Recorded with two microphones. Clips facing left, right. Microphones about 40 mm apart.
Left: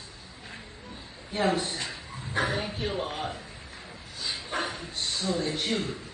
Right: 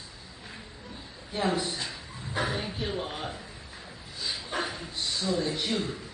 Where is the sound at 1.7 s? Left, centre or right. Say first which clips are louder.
Even; left.